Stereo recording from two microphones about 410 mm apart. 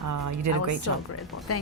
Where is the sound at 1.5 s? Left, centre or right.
Left.